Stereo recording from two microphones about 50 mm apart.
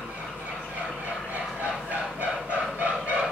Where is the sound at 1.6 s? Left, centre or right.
Right.